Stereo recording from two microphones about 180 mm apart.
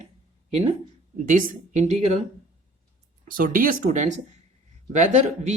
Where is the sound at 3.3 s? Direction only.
50° right (ahead or behind).